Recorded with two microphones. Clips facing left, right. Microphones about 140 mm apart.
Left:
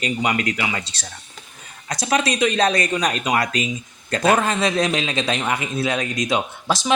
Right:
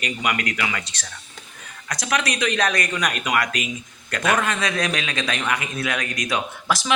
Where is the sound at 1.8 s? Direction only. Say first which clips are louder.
Left 4 dB; 25° left (ahead or behind).